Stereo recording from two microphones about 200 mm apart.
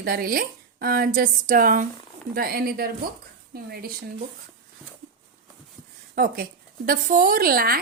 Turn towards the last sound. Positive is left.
turn(degrees=-45)  # may be behind; listen again after turning